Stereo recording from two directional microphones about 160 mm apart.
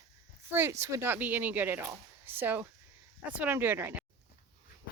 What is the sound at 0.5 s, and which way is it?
Speech, 15° right (ahead or behind).